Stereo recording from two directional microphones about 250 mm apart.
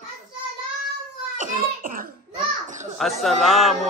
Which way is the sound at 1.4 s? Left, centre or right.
Right.